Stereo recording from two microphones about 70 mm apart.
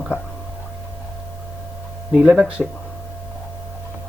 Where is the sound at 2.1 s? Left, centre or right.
Centre.